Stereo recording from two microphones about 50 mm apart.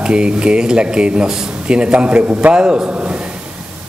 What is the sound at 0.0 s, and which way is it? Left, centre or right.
Speech, centre.